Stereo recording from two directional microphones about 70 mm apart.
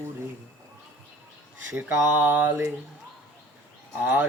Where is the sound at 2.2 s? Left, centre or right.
Right.